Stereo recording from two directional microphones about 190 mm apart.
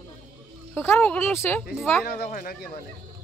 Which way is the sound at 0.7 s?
10° left (ahead or behind).